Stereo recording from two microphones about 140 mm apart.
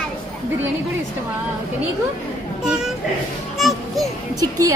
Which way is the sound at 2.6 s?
5° right (ahead or behind).